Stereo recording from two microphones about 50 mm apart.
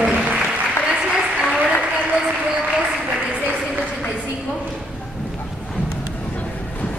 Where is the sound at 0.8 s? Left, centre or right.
Centre.